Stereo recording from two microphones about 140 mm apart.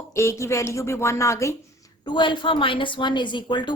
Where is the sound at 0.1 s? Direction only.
20° left (ahead or behind).